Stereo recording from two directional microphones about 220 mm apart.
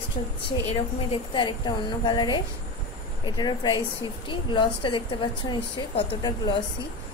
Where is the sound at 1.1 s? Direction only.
20° left (ahead or behind).